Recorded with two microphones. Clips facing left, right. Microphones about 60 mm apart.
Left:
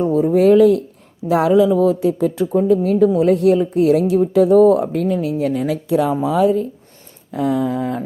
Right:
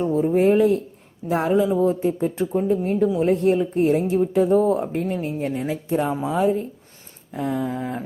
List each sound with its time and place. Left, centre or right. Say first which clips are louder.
0.0 s speech: left 5 dB; left
5.6 s speech: left 4 dB; left
7.3 s a sound: left 6 dB; left